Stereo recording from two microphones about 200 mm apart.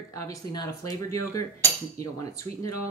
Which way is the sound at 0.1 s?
15° left (ahead or behind).